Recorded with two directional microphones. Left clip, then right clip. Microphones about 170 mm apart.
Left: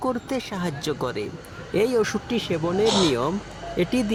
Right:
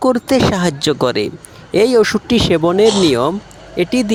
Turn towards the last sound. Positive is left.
turn(degrees=-35)  # may be behind; listen again after turning